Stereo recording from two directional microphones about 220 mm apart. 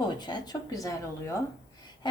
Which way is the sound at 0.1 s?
20° left (ahead or behind).